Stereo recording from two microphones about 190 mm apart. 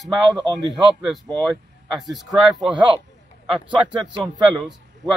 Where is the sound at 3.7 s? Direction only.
25° right (ahead or behind).